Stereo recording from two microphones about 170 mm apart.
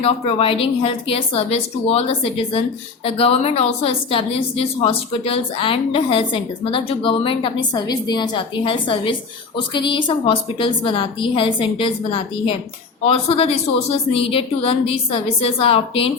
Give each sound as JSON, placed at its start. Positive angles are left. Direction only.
{"t": 0.0, "sound": "a woman's voice", "side_deg": 35}